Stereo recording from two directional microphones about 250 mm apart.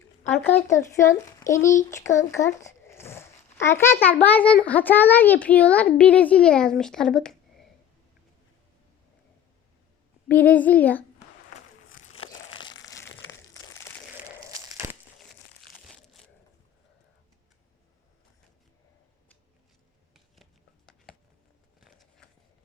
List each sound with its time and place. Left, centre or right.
0.4 s a child's voice: centre
10.2 s a child's voice: centre
11.9 s crumpling: left
14.8 s crumpling: centre
20.1 s a sound: centre